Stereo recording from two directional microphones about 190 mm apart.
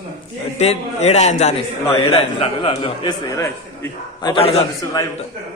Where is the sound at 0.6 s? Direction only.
35° left (ahead or behind); by 4.3 s 15° left (ahead or behind).